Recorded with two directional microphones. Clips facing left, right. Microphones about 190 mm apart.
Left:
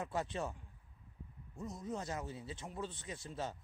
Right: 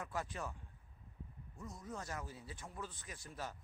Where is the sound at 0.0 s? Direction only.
25° left (ahead or behind).